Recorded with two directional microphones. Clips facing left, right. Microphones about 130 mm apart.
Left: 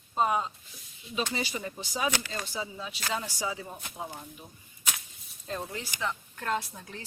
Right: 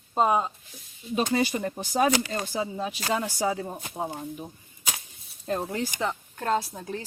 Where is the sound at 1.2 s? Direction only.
50° right (ahead or behind).